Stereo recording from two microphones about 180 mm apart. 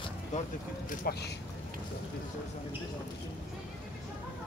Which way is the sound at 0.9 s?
55° left (ahead or behind).